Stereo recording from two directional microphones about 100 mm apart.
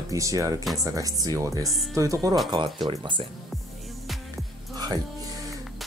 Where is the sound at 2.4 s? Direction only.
50° right (ahead or behind).